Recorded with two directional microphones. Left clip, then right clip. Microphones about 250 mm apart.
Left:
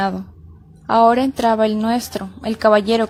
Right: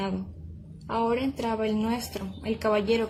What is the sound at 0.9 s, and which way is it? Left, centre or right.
A woman's voice, left.